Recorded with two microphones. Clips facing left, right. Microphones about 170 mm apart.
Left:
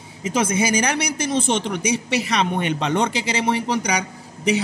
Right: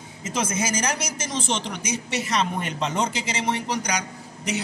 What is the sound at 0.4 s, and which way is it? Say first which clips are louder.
A man's voice: left 6 dB; 65° left (ahead or behind).